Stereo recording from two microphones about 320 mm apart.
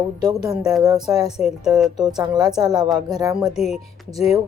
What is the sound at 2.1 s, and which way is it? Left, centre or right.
Speech, centre.